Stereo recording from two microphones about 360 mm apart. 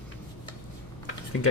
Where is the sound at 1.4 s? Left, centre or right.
Left.